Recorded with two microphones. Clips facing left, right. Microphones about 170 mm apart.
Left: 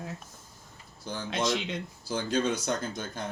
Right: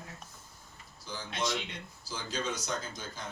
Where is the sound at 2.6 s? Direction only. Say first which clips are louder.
Left 6 dB; 55° left (ahead or behind).